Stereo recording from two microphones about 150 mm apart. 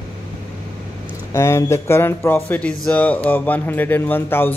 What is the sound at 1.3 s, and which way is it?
Speech, 20° left (ahead or behind).